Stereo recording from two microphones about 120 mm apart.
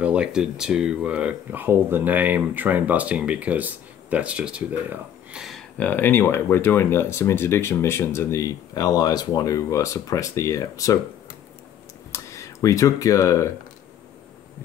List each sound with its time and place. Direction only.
0.0 s speech: 10° right (ahead or behind)
5.8 s speech: 15° left (ahead or behind)
12.1 s speech: 25° left (ahead or behind)